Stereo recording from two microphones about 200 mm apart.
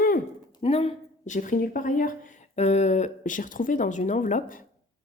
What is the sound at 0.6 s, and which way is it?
Speech, 30° left (ahead or behind).